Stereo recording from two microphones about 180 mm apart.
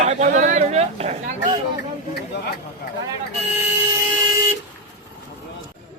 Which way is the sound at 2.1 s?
65° left (ahead or behind).